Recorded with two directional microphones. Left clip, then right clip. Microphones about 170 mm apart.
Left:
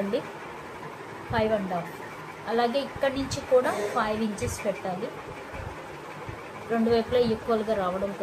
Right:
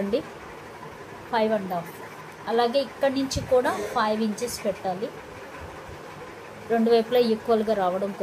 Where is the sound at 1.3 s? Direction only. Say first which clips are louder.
Right 2 dB; 35° right (ahead or behind).